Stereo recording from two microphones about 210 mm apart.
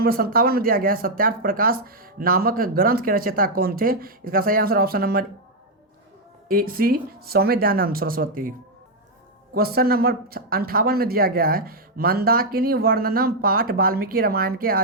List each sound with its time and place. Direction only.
0.0 s speech: 45° right (ahead or behind)
6.5 s speech: 45° right (ahead or behind)
9.6 s speech: 45° right (ahead or behind)